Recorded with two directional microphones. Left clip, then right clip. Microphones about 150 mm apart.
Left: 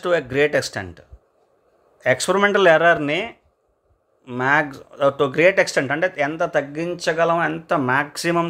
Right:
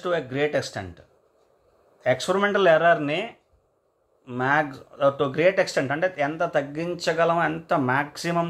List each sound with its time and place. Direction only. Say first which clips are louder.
0.0 s speech: left 6 dB; 45° left (ahead or behind)